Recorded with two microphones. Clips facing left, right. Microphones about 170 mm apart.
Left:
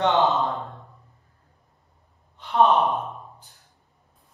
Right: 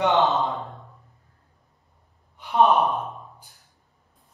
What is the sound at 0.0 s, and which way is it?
Speech, 20° right (ahead or behind).